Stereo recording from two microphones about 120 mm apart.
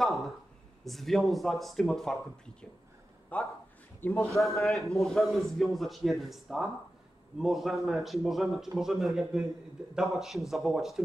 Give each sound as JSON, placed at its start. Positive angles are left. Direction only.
{"t": 0.0, "sound": "a sound", "side_deg": 0}
{"t": 0.8, "sound": "a man's voice", "side_deg": 0}
{"t": 3.3, "sound": "a man's voice", "side_deg": 10}
{"t": 4.3, "sound": "a man's voice", "side_deg": 0}